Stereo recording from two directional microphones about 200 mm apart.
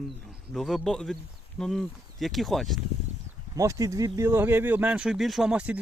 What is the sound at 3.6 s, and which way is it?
Speech, 15° right (ahead or behind).